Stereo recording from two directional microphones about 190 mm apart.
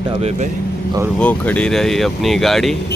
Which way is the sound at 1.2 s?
5° left (ahead or behind).